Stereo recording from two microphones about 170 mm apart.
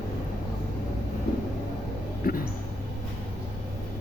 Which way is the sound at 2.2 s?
60° left (ahead or behind).